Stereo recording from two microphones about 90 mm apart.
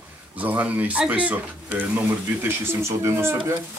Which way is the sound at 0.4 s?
15° right (ahead or behind).